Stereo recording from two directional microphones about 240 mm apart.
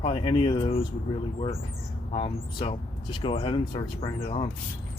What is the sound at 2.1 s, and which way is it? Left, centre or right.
Speech, left.